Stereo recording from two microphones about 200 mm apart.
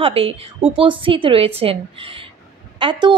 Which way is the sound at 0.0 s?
30° right (ahead or behind).